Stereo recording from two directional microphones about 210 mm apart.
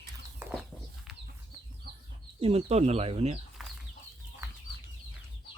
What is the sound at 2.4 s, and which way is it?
Speech, 30° right (ahead or behind).